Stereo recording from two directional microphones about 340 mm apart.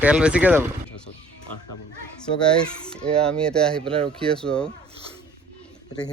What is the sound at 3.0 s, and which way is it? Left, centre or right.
Speech, centre.